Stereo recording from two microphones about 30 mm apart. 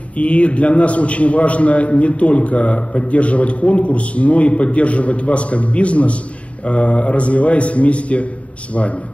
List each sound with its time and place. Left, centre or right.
0.2 s a man's voice: left